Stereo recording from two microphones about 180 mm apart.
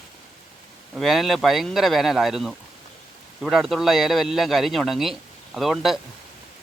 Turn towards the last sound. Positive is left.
turn(degrees=0)  # may be behind; listen again after turning